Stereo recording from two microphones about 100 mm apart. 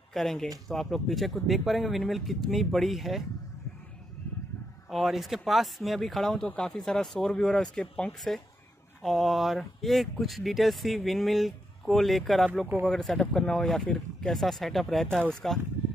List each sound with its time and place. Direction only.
0.1 s speech: 5° left (ahead or behind)
4.9 s speech: centre (ahead or behind)